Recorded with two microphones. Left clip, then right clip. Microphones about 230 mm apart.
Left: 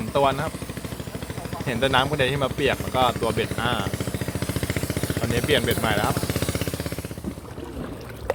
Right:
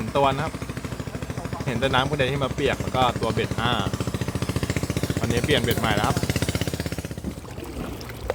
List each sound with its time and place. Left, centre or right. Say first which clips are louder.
0.1 s speech: even; centre
1.6 s speech: left 2 dB; centre
3.9 s vehicle: even; right
5.3 s speech: left 1 dB; centre